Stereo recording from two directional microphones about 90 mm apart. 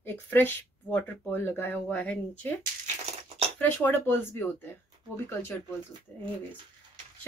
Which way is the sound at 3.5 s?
20° left (ahead or behind).